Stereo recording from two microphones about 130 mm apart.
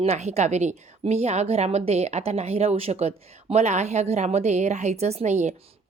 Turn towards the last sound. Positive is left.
turn(degrees=-65)  # may be behind; listen again after turning